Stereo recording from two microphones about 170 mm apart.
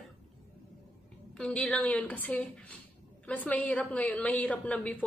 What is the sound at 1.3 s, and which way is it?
A woman's voice, 5° left (ahead or behind).